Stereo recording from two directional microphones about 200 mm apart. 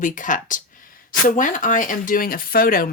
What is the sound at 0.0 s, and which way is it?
A woman's voice, 40° left (ahead or behind).